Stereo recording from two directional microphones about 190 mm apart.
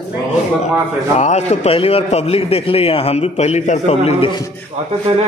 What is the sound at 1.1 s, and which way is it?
A man's voice, 35° left (ahead or behind).